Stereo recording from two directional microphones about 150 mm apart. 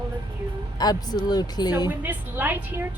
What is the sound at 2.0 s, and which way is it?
Speech, 10° right (ahead or behind).